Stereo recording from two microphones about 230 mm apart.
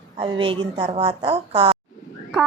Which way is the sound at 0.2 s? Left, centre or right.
Right.